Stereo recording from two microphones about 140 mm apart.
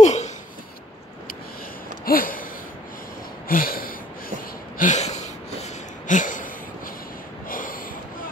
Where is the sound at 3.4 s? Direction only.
90° left.